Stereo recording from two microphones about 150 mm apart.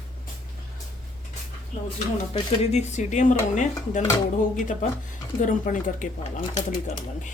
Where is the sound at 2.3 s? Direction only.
45° left (ahead or behind).